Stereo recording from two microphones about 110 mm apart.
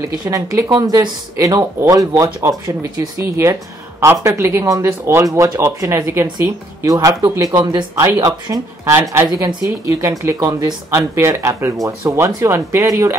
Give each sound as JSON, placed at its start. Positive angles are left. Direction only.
{"t": 0.2, "sound": "speech", "side_deg": -30}